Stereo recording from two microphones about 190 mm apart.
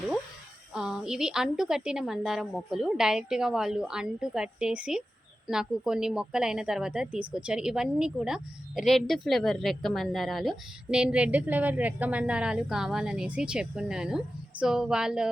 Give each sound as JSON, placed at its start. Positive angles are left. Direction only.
{"t": 0.7, "sound": "a woman's voice", "side_deg": -5}